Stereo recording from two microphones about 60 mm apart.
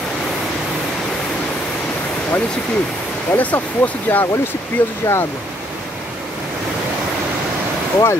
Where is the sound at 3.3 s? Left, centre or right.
Left.